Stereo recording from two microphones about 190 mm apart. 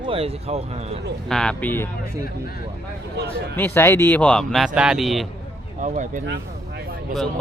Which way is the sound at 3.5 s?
10° left (ahead or behind).